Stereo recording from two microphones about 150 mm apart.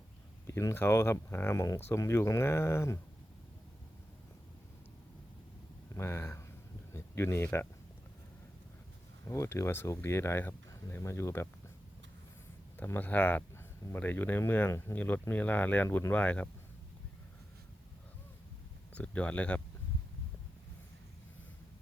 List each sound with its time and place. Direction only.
0.4 s speech: 20° left (ahead or behind)
5.9 s speech: 15° left (ahead or behind)
9.2 s speech: 20° left (ahead or behind)
12.7 s speech: 10° left (ahead or behind)
18.9 s speech: 10° left (ahead or behind)